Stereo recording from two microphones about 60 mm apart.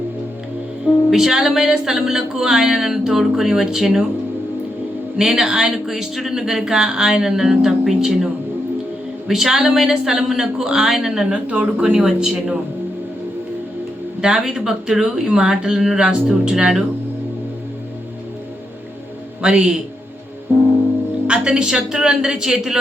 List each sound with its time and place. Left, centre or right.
1.1 s speech: centre
5.1 s speech: centre
11.4 s speech: right
11.9 s speech: centre
14.2 s speech: centre
19.4 s speech: centre
21.2 s speech: centre